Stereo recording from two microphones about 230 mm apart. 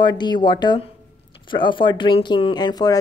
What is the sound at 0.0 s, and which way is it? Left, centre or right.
Speech, centre.